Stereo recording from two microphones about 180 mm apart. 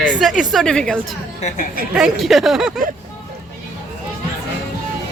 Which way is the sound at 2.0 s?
Centre (ahead or behind).